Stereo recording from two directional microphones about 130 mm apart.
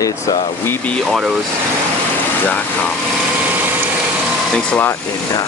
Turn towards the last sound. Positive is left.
turn(degrees=10)  # may be behind; listen again after turning